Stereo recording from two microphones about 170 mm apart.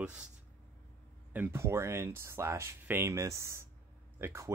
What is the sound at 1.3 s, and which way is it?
Speech, 15° right (ahead or behind).